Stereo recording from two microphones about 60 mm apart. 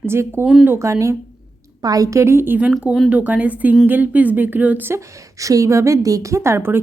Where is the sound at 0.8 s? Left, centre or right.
Right.